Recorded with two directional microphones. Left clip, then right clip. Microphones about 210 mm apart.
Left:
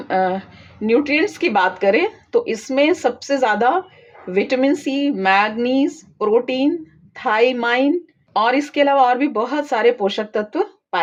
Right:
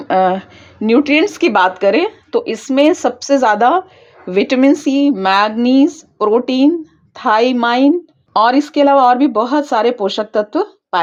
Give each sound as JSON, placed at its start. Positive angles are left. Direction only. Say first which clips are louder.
{"t": 0.1, "sound": "speech", "louder": "right 6 dB", "side_deg": -30}